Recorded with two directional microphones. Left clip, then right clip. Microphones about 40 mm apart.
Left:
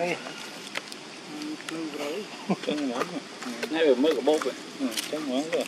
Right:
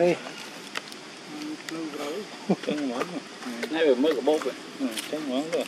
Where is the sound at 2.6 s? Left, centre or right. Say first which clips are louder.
Even; centre.